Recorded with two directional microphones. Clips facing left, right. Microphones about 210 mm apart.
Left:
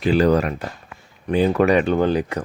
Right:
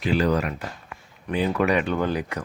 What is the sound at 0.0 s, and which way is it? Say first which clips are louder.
Speech: left 5 dB; 35° left (ahead or behind).